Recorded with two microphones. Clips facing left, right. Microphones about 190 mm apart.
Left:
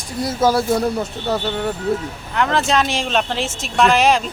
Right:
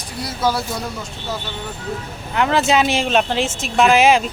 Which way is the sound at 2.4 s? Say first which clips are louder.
Right 1 dB; 5° right (ahead or behind).